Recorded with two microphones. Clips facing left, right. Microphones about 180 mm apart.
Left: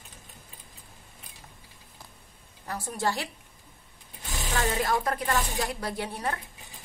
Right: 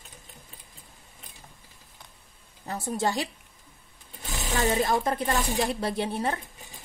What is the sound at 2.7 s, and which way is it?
Speech, 25° right (ahead or behind).